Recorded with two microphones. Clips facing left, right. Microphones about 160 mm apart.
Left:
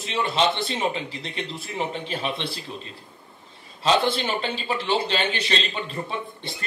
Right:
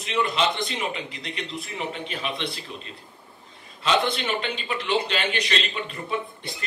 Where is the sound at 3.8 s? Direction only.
30° left (ahead or behind).